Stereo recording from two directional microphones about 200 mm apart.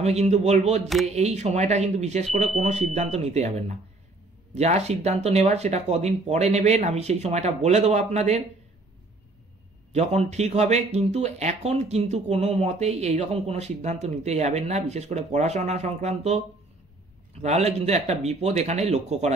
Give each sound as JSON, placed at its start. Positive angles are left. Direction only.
{"t": 0.0, "sound": "speech", "side_deg": -35}
{"t": 0.8, "sound": "speech", "side_deg": 0}
{"t": 1.1, "sound": "speech", "side_deg": -35}
{"t": 9.9, "sound": "speech", "side_deg": -35}